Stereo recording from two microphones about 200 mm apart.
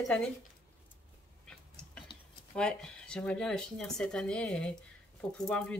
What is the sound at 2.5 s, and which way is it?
Speech, 5° left (ahead or behind).